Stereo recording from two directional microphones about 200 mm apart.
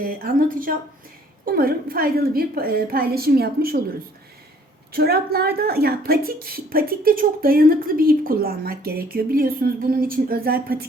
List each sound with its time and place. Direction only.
0.0 s speech: 45° right (ahead or behind)
4.9 s speech: 50° right (ahead or behind)